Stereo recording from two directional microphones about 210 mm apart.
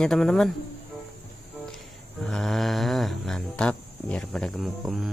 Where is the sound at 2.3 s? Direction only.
Centre (ahead or behind).